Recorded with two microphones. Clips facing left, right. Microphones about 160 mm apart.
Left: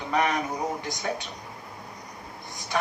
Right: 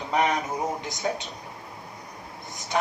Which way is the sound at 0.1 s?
20° right (ahead or behind).